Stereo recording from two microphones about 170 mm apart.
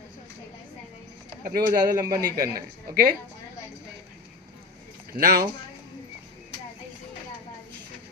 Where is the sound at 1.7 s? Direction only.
20° right (ahead or behind).